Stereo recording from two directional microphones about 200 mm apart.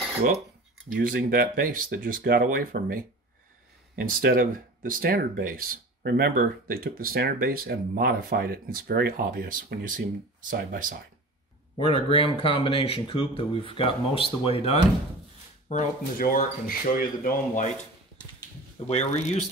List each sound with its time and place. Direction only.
0.9 s speech: 45° right (ahead or behind)
11.9 s speech: 25° left (ahead or behind)
15.8 s speech: 45° left (ahead or behind)
18.9 s speech: 35° left (ahead or behind)